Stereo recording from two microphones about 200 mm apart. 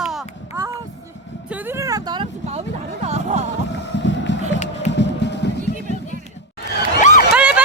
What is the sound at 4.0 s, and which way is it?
Music, 65° left (ahead or behind).